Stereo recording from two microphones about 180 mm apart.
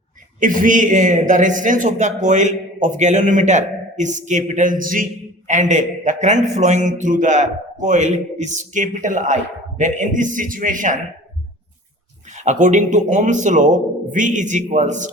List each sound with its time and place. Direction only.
0.3 s a man's voice: 50° right (ahead or behind)
12.3 s a man's voice: 40° right (ahead or behind)